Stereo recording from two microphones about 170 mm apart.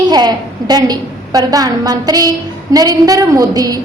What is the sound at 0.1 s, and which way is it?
A woman's voice, 25° right (ahead or behind).